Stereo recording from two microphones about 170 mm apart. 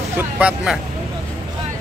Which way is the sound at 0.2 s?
5° right (ahead or behind).